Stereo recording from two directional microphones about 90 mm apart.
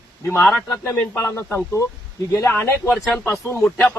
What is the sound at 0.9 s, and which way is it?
Speech, 20° left (ahead or behind).